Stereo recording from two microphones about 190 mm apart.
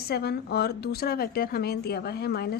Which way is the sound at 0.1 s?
60° left (ahead or behind).